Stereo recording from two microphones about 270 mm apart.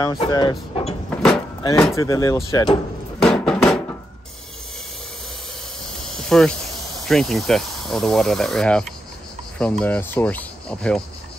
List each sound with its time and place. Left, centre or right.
0.0 s speech: centre
1.1 s vehicle: centre
2.0 s speech: centre
3.2 s a sound: centre
6.0 s insect: centre
7.1 s speech: centre